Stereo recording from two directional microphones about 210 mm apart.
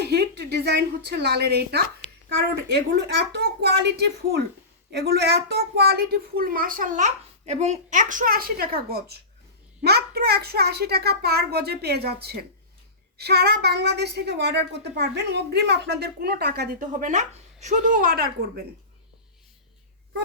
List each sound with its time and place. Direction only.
0.0 s a woman's voice: 50° right (ahead or behind)